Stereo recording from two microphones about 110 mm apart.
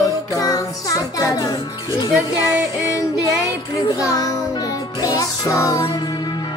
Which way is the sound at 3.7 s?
30° left (ahead or behind).